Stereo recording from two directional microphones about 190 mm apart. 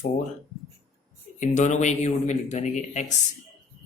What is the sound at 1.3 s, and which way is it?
Speech, 40° left (ahead or behind).